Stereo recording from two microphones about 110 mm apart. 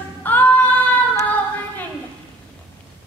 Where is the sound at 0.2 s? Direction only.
15° left (ahead or behind).